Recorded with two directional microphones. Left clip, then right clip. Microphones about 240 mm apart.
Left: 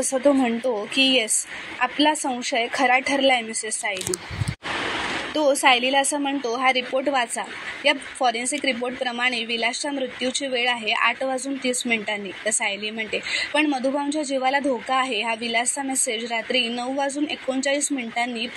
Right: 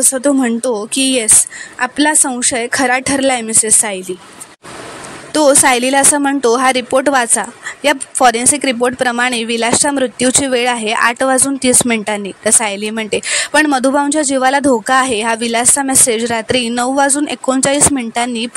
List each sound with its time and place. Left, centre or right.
0.1 s a woman's voice: right
5.3 s a woman's voice: right